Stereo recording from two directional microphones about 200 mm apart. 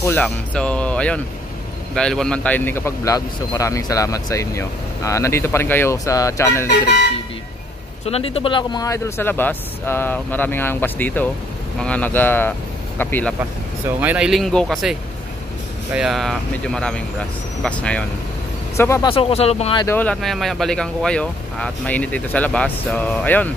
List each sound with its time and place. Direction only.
0.0 s a man's voice: 10° left (ahead or behind)
8.0 s a man's voice: 30° left (ahead or behind); by 13.3 s 10° left (ahead or behind)
13.9 s a man's voice: 5° right (ahead or behind); by 19.0 s 15° left (ahead or behind)
19.0 s speech: 30° left (ahead or behind)
19.8 s a man's voice: 10° left (ahead or behind)